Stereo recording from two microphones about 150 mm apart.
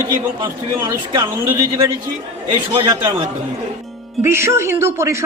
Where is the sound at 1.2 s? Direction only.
15° right (ahead or behind).